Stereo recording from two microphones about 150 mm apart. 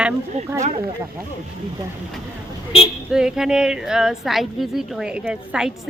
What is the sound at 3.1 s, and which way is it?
A woman's voice, 5° right (ahead or behind).